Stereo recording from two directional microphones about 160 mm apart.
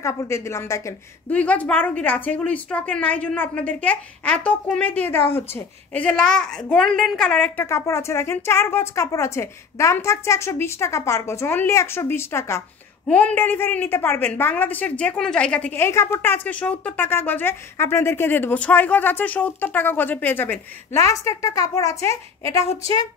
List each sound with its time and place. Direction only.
0.0 s a woman's voice: 20° left (ahead or behind)